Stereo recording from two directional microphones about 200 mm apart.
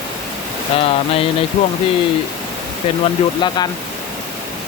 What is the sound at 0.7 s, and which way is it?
Speech, 30° left (ahead or behind).